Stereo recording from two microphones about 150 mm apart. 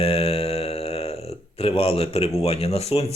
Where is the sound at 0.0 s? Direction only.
40° left (ahead or behind).